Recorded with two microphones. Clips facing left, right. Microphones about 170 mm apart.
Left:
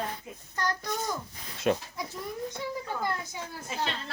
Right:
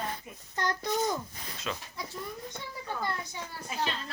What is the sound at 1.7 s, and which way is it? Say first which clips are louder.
Speech: left 11 dB; 55° left (ahead or behind).